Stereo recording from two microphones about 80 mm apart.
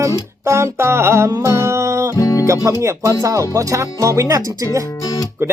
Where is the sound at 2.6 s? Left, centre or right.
Right.